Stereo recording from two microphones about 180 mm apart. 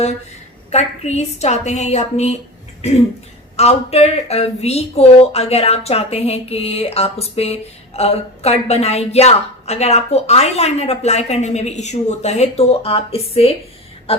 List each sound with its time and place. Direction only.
0.7 s a woman's voice: 35° left (ahead or behind)
3.6 s a woman's voice: 35° left (ahead or behind)